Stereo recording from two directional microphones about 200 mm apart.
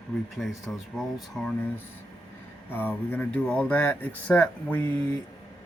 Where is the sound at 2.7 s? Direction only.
10° left (ahead or behind).